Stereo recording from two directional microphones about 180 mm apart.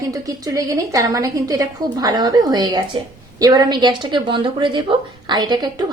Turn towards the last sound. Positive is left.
turn(degrees=-25)  # may be behind; listen again after turning